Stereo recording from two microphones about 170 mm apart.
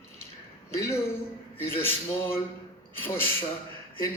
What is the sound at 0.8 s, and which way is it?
Speech, 15° left (ahead or behind).